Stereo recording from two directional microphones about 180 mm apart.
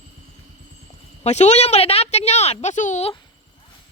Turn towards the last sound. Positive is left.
turn(degrees=40)  # may be behind; listen again after turning